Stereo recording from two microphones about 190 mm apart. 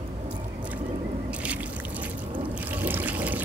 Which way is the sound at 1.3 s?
5° right (ahead or behind).